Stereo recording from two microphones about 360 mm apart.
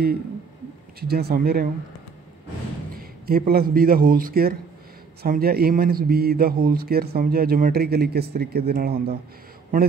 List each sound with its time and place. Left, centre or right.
1.0 s a man's voice: right
3.0 s a man's voice: right